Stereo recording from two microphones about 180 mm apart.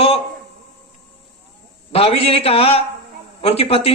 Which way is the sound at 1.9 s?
35° left (ahead or behind).